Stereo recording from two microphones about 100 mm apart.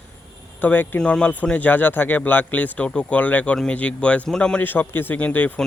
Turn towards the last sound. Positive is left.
turn(degrees=15)  # may be behind; listen again after turning